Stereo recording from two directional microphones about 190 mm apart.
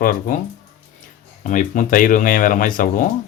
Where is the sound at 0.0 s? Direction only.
45° left (ahead or behind).